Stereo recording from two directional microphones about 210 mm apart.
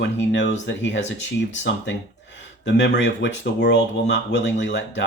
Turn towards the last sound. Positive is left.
turn(degrees=60)  # may be behind; listen again after turning